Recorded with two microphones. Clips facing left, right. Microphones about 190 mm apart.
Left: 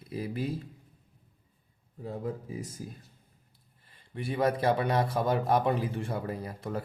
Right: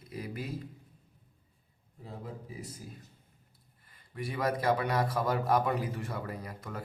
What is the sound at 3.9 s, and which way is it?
A man's voice, 30° left (ahead or behind).